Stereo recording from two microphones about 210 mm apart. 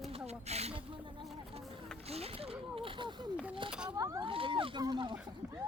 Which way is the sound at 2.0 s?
30° right (ahead or behind).